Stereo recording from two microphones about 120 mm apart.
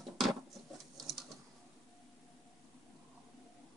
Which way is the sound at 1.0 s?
Centre (ahead or behind).